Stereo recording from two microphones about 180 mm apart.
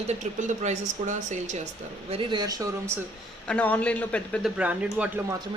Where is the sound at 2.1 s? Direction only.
25° right (ahead or behind).